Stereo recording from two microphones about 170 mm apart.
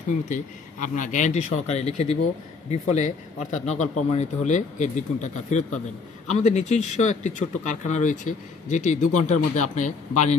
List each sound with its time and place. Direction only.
0.3 s speech: 50° left (ahead or behind)